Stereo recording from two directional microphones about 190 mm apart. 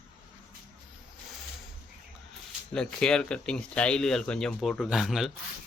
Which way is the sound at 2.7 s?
5° left (ahead or behind).